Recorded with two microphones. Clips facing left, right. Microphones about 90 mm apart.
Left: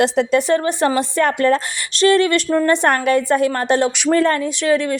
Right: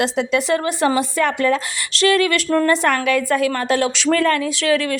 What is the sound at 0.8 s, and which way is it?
Speech, 10° right (ahead or behind).